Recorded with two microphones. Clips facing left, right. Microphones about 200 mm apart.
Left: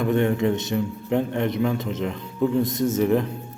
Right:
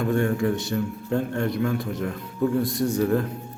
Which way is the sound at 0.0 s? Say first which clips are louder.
Left 2 dB; 20° left (ahead or behind).